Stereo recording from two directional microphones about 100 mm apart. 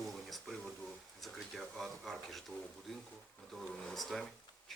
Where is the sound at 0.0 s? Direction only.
Centre (ahead or behind).